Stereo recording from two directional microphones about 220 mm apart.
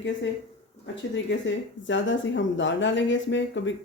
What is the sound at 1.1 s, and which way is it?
Speech, 55° left (ahead or behind).